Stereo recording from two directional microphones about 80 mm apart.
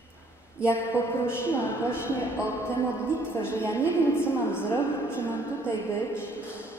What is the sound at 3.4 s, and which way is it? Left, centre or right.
A woman's voice, left.